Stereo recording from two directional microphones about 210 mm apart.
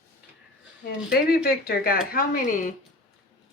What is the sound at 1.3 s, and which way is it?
Speech, 45° left (ahead or behind).